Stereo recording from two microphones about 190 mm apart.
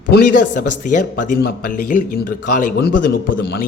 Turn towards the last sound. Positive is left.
turn(degrees=55)  # may be behind; listen again after turning